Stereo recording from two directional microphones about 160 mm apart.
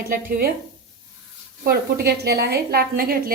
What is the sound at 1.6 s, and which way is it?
A woman's voice, 75° right (ahead or behind).